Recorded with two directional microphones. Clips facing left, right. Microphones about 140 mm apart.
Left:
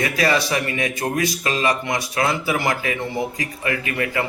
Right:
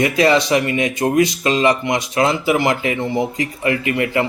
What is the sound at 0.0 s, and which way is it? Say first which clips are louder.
Speech: right 5 dB; 20° right (ahead or behind).